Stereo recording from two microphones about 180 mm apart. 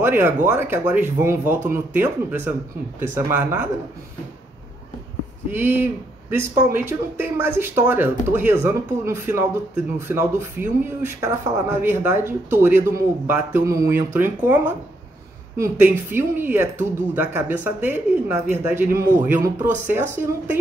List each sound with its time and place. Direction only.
0.0 s speech: 10° right (ahead or behind)
5.5 s speech: 10° right (ahead or behind)